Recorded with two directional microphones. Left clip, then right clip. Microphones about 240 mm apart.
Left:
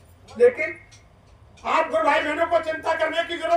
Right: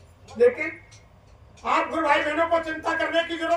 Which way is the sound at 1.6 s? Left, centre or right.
Centre.